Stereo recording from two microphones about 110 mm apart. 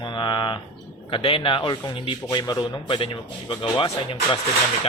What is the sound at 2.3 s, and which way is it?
Speech, 40° left (ahead or behind).